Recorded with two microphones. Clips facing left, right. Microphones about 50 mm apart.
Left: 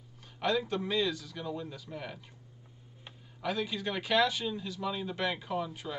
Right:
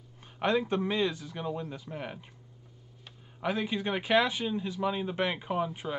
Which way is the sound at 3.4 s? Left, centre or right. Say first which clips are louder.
Right 3 dB; right.